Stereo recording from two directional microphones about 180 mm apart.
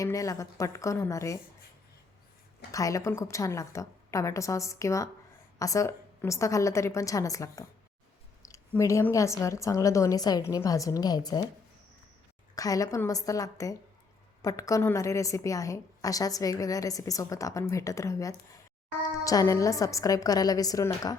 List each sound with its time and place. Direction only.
0.0 s a woman's voice: 20° left (ahead or behind)
2.7 s a woman's voice: 20° left (ahead or behind)
12.5 s a woman's voice: 20° left (ahead or behind)